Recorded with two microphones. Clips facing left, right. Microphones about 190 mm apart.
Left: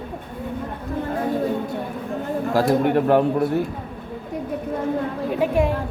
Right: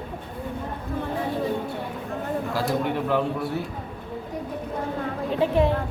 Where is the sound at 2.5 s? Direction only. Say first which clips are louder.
Left 9 dB; 50° left (ahead or behind).